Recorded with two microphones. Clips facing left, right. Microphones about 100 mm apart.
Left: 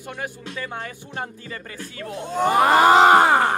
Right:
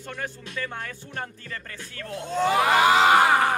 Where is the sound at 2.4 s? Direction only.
45° left (ahead or behind).